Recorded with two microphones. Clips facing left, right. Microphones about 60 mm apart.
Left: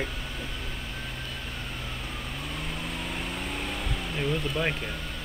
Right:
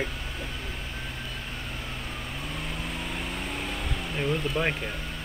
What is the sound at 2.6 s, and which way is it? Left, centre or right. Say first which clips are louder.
Vehicle: even; centre.